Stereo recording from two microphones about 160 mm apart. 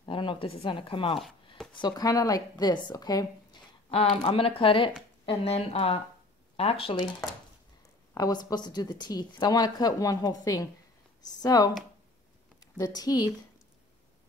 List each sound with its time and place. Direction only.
0.0 s speech: 30° left (ahead or behind)
3.9 s speech: 35° left (ahead or behind)
8.1 s speech: 25° left (ahead or behind)
12.7 s speech: 25° left (ahead or behind)